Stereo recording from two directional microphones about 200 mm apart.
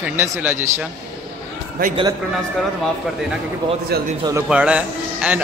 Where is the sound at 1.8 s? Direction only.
45° right (ahead or behind).